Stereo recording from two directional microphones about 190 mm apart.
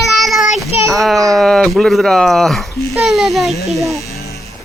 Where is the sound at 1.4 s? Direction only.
Centre (ahead or behind).